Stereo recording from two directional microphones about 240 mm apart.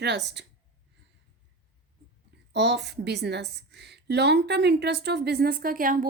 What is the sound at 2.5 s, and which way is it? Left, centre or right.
A woman's voice, right.